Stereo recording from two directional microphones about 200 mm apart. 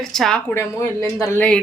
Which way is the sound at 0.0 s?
Centre (ahead or behind).